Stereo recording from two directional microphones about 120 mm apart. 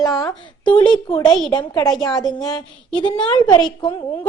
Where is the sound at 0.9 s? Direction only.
35° left (ahead or behind).